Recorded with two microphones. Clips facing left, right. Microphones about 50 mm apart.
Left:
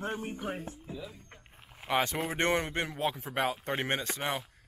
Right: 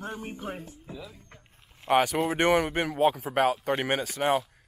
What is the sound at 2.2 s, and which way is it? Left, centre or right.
Speech, right.